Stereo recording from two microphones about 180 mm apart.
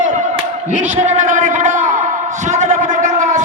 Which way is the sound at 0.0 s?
40° right (ahead or behind).